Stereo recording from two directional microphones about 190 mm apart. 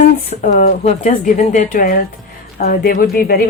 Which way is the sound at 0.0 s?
40° left (ahead or behind).